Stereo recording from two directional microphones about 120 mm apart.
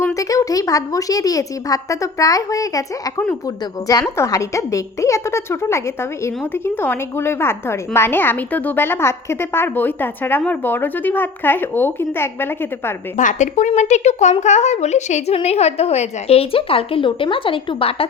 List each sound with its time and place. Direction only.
0.1 s a woman's voice: 30° left (ahead or behind)
13.1 s a woman's voice: 90° left
15.4 s a woman's voice: 65° left (ahead or behind)